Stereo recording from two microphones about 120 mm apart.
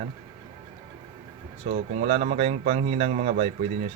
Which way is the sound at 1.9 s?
70° right (ahead or behind).